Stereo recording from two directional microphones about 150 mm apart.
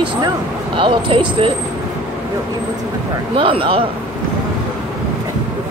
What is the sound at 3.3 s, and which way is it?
Speech, 35° right (ahead or behind).